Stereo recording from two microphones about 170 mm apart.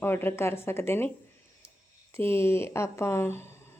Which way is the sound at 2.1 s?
15° left (ahead or behind).